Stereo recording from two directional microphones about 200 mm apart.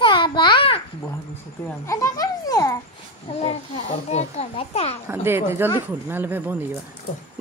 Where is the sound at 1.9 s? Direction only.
15° left (ahead or behind).